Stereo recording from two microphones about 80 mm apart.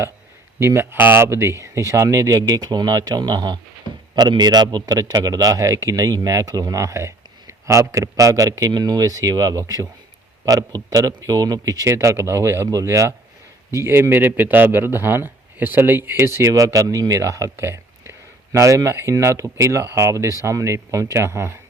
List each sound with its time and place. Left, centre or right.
0.6 s a man's voice: right
8.7 s a man's voice: right
16.5 s a man's voice: right